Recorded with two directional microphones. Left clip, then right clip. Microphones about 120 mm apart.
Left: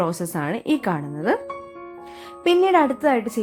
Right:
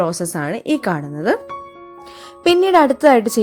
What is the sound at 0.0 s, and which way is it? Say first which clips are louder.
Speech: right 4 dB; 20° right (ahead or behind).